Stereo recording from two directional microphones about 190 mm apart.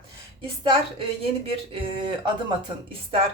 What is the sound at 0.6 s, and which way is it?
A woman's voice, 30° right (ahead or behind).